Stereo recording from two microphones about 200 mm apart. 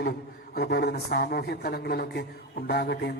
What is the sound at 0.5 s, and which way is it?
A man's voice, 55° left (ahead or behind).